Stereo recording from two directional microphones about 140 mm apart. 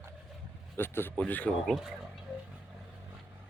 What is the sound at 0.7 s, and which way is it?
Speech, 15° left (ahead or behind).